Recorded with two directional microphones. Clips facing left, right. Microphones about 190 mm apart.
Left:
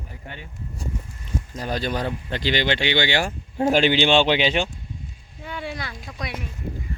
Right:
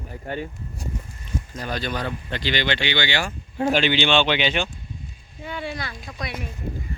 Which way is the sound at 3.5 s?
40° left (ahead or behind).